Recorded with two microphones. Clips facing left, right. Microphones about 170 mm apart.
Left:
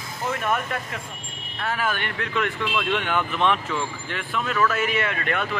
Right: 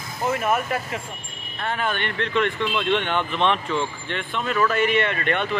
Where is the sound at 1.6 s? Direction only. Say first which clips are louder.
Right 1 dB; 5° left (ahead or behind).